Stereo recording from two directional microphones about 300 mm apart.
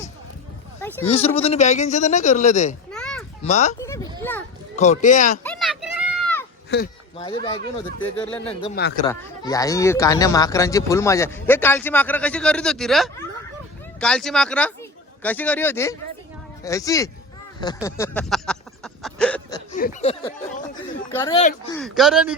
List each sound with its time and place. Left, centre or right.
0.8 s speech: centre
1.0 s speech: centre
2.9 s children playing: centre
3.4 s speech: left
3.8 s a sound: centre
4.8 s speech: left
5.4 s a sound: centre
6.7 s speech: left
7.2 s speech: centre
8.7 s speech: left
9.0 s speech: centre
17.8 s a sound: centre
19.7 s speech: left
21.1 s speech: centre